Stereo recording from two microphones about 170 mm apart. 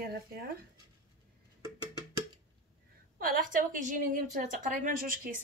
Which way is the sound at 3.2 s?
55° right (ahead or behind).